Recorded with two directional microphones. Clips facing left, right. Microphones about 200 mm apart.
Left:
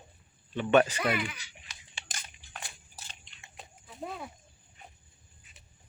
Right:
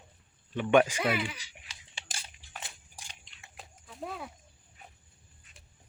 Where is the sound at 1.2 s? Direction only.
30° right (ahead or behind).